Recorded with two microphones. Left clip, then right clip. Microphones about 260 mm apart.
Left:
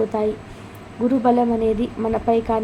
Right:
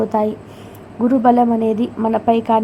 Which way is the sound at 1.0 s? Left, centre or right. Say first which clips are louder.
Right 4 dB; centre.